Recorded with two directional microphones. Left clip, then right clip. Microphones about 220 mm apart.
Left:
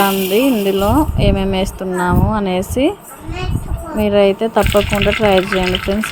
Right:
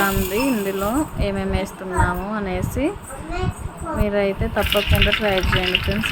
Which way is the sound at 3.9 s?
25° left (ahead or behind).